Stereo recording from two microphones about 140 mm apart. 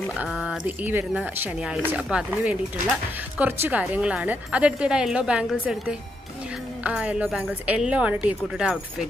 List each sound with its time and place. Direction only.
0.2 s a woman's voice: 5° right (ahead or behind)